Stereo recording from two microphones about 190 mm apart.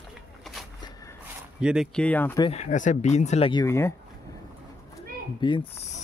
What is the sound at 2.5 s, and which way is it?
Speech, 40° left (ahead or behind).